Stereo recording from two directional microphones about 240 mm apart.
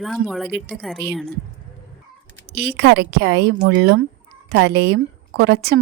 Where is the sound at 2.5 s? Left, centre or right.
Right.